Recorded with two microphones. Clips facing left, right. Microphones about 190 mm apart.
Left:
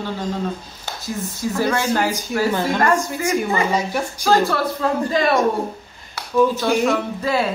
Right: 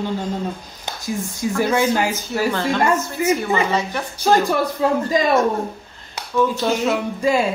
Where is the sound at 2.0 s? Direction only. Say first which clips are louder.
Left 1 dB; 10° left (ahead or behind).